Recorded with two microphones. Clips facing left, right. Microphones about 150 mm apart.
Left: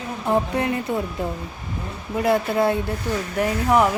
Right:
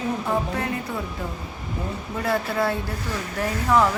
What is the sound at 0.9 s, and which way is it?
Speech, 20° left (ahead or behind).